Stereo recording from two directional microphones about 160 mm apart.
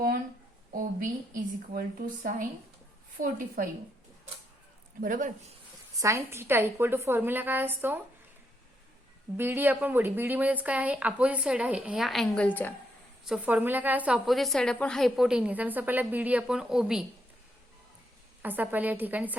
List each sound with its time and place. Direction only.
0.7 s a woman's voice: 60° right (ahead or behind)
3.2 s a woman's voice: 60° right (ahead or behind)
4.9 s a woman's voice: 55° right (ahead or behind)
6.0 s speech: 20° right (ahead or behind)
9.4 s speech: 15° right (ahead or behind); by 12.7 s 10° left (ahead or behind)
13.2 s a woman's voice: 5° right (ahead or behind)
18.4 s speech: 10° right (ahead or behind)